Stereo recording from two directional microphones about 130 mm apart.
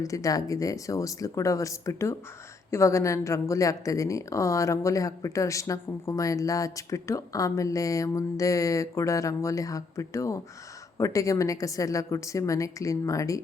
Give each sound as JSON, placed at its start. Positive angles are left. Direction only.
{"t": 0.0, "sound": "speech", "side_deg": 25}